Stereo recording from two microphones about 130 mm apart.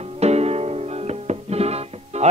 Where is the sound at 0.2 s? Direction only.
55° right (ahead or behind).